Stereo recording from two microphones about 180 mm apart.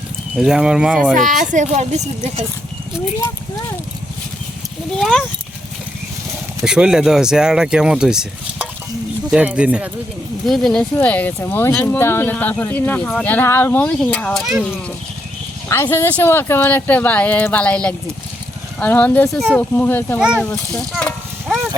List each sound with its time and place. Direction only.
0.3 s speech: 5° right (ahead or behind)
1.1 s a woman's voice: 45° right (ahead or behind)
4.9 s speech: centre (ahead or behind)
6.7 s speech: 5° right (ahead or behind)
15.7 s speech: 15° left (ahead or behind)
19.7 s speech: 10° left (ahead or behind)
20.9 s livestock: centre (ahead or behind)